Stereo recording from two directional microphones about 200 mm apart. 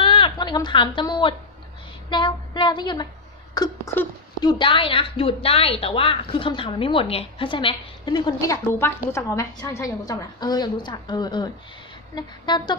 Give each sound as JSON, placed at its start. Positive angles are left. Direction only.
{"t": 0.0, "sound": "a woman's voice", "side_deg": 25}
{"t": 2.0, "sound": "female singing", "side_deg": 25}
{"t": 3.5, "sound": "speech", "side_deg": 15}
{"t": 4.5, "sound": "a woman's voice", "side_deg": 25}